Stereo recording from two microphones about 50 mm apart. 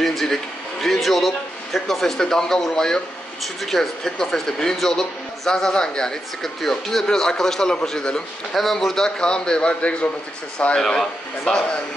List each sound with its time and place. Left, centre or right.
0.0 s a man's voice: centre; by 10.0 s left
10.8 s speech: centre